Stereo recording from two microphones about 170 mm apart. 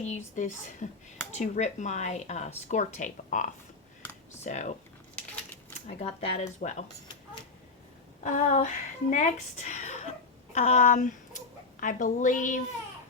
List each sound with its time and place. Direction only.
0.3 s speech: 45° left (ahead or behind)
6.0 s speech: 40° left (ahead or behind)
8.2 s speech: 45° left (ahead or behind)